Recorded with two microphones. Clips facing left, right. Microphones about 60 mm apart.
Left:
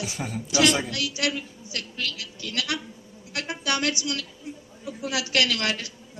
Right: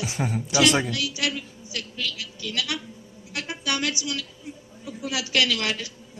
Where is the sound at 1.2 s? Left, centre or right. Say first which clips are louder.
Left 1 dB; left.